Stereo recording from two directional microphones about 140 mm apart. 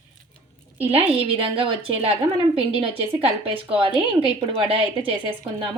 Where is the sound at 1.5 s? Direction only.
40° right (ahead or behind).